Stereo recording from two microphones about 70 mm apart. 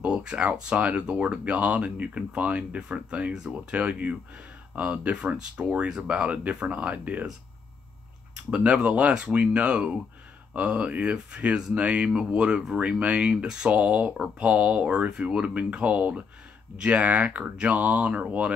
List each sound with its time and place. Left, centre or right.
0.0 s speech: centre
8.5 s speech: centre